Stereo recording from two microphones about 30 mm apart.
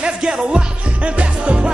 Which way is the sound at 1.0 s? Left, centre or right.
Right.